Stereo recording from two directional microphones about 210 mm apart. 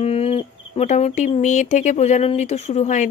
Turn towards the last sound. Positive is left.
turn(degrees=35)  # may be behind; listen again after turning